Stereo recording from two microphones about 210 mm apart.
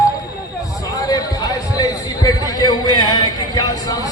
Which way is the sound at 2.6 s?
20° left (ahead or behind).